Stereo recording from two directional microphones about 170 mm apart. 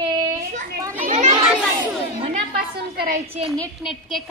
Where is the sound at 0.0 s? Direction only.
25° right (ahead or behind).